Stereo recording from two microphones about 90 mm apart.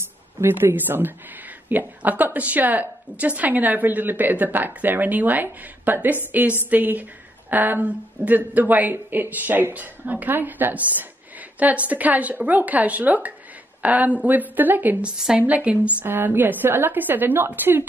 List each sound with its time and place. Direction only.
0.0 s a woman's voice: 25° right (ahead or behind)